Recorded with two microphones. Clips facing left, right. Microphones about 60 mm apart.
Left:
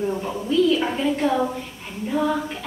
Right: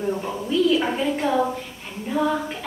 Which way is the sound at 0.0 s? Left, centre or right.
Centre.